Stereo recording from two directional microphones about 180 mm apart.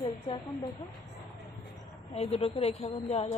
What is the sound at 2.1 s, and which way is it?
A woman's voice, 35° left (ahead or behind).